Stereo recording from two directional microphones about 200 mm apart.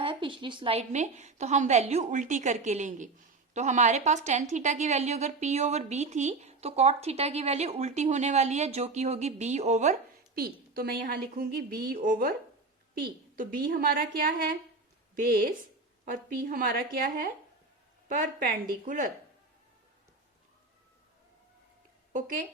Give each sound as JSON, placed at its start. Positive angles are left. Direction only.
{"t": 0.0, "sound": "a woman's voice", "side_deg": -25}
{"t": 10.3, "sound": "a woman's voice", "side_deg": -50}
{"t": 13.3, "sound": "a woman's voice", "side_deg": -45}
{"t": 16.0, "sound": "a woman's voice", "side_deg": -45}
{"t": 22.1, "sound": "a woman's voice", "side_deg": -45}